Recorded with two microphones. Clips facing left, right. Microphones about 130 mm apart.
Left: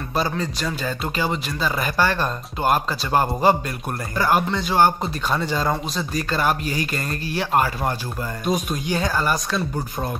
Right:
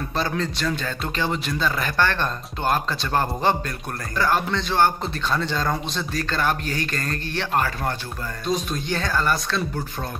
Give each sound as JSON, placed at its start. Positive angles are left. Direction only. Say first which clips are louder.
{"t": 0.3, "sound": "a man's voice", "louder": "right 1 dB", "side_deg": 5}